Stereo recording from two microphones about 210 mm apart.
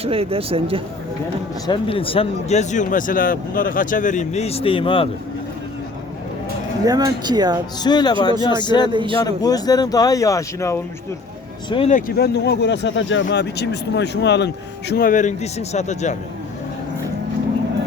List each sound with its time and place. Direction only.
0.0 s speech: 25° right (ahead or behind)
1.6 s speech: 25° left (ahead or behind)
6.8 s speech: 20° right (ahead or behind)
7.8 s speech: 20° left (ahead or behind)
8.9 s speech: 20° right (ahead or behind)
9.2 s speech: 15° left (ahead or behind)
11.7 s speech: 30° left (ahead or behind)